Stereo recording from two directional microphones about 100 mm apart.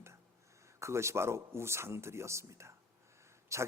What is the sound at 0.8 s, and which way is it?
A man's voice, 30° right (ahead or behind).